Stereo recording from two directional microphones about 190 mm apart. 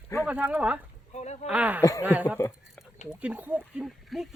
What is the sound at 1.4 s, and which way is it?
Speech, 5° right (ahead or behind).